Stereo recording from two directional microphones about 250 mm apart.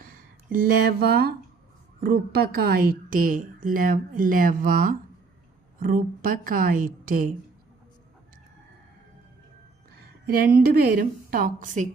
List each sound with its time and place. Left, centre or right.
0.0 s a woman's voice: right
10.0 s a woman's voice: right